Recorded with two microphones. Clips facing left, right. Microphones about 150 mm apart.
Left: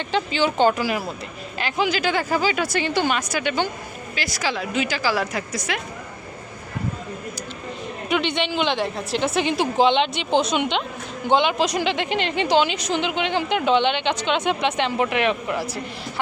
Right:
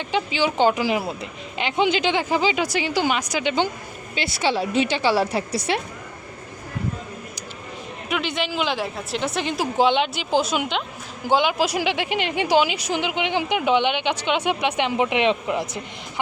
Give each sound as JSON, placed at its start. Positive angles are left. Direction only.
{"t": 0.1, "sound": "speech", "side_deg": -10}
{"t": 4.1, "sound": "a woman's voice", "side_deg": -30}
{"t": 8.1, "sound": "a woman's voice", "side_deg": 0}